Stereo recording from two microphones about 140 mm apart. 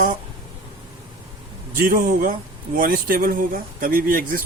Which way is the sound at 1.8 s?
75° right (ahead or behind).